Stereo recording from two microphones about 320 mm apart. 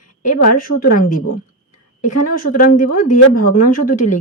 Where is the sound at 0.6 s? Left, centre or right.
Left.